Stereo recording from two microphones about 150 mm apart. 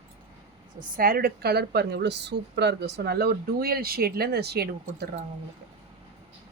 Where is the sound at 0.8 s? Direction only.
75° right (ahead or behind); by 5.0 s 90° right.